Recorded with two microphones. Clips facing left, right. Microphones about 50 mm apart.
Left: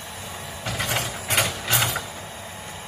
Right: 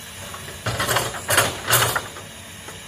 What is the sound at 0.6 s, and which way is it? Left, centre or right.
Mechanisms, right.